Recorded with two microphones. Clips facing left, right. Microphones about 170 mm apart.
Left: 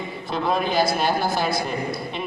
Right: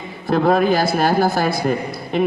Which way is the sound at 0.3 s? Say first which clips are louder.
Right 9 dB; 55° right (ahead or behind).